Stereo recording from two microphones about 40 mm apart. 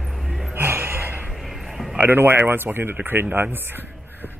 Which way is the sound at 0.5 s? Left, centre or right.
Right.